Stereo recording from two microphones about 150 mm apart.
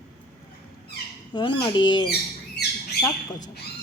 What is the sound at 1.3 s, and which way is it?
Speech, 30° left (ahead or behind).